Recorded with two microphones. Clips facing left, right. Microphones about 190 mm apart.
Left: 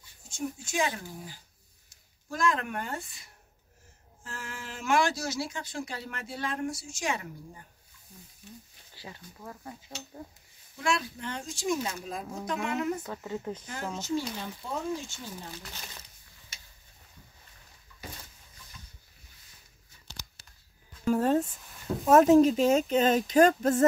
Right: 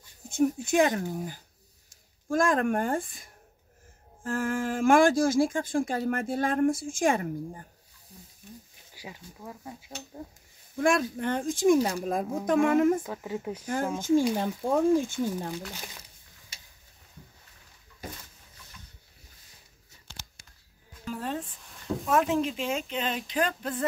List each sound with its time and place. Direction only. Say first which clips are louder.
0.3 s speech: right 10 dB; 60° right (ahead or behind)
8.1 s speech: right 1 dB; 35° right (ahead or behind)
8.9 s speech: right 2 dB; 15° right (ahead or behind)
10.8 s speech: right 6 dB; 50° right (ahead or behind)
13.0 s speech: right 2 dB; 10° right (ahead or behind)
13.9 s speech: right 9 dB; 50° right (ahead or behind)
21.0 s music: left 9 dB; 45° left (ahead or behind)
22.0 s speech: left 8 dB; 40° left (ahead or behind)